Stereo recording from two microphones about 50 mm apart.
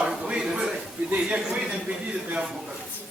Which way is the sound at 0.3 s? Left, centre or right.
Centre.